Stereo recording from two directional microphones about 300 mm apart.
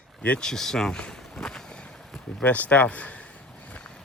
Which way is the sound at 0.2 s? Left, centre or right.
Centre.